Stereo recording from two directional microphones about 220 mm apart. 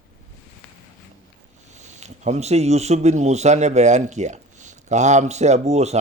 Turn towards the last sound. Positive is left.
turn(degrees=-30)  # may be behind; listen again after turning